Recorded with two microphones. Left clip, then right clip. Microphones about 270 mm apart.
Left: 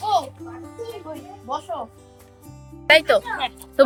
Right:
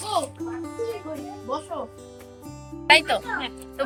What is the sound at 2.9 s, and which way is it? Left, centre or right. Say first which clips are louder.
Speech: left 3 dB; centre.